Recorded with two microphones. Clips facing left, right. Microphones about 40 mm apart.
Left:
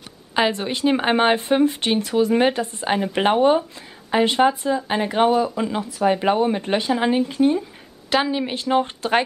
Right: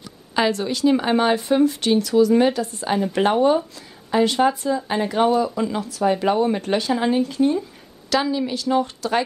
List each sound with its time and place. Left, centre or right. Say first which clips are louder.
0.4 s speech: right 1 dB; left